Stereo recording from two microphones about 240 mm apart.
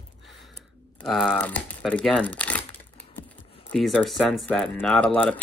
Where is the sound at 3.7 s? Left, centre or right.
Centre.